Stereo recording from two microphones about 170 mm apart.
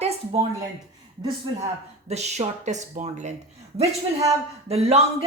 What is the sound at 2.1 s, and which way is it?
Speech, 40° right (ahead or behind).